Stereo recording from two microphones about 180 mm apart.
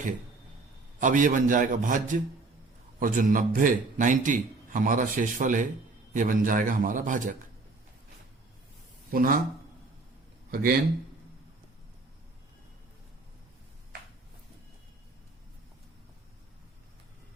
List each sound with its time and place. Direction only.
0.9 s a man's voice: 45° right (ahead or behind)
9.0 s speech: 55° right (ahead or behind)
10.5 s speech: 55° right (ahead or behind)